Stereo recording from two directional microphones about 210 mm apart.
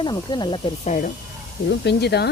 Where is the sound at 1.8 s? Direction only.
50° left (ahead or behind).